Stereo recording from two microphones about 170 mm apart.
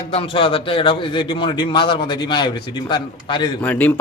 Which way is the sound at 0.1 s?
35° left (ahead or behind).